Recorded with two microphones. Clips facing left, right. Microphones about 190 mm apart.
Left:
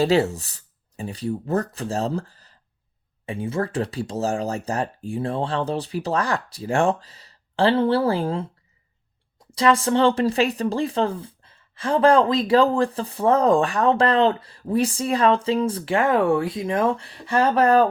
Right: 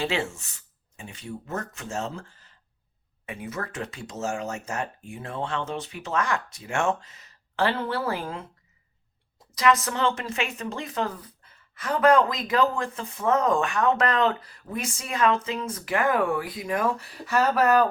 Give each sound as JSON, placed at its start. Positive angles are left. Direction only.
{"t": 0.0, "sound": "speech", "side_deg": 40}
{"t": 9.5, "sound": "speech", "side_deg": 30}